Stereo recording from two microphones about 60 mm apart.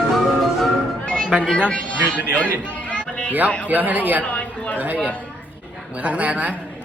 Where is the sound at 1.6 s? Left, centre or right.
Left.